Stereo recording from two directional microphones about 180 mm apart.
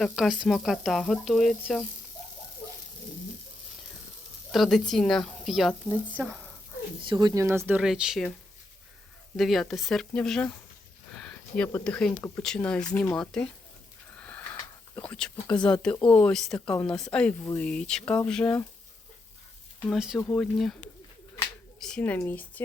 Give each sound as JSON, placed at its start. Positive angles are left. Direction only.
{"t": 0.0, "sound": "speech", "side_deg": 0}
{"t": 4.5, "sound": "speech", "side_deg": 0}
{"t": 7.1, "sound": "speech", "side_deg": -20}
{"t": 9.3, "sound": "speech", "side_deg": 0}
{"t": 14.2, "sound": "a sound", "side_deg": 10}
{"t": 15.1, "sound": "speech", "side_deg": 5}
{"t": 19.8, "sound": "speech", "side_deg": 0}
{"t": 21.8, "sound": "speech", "side_deg": 5}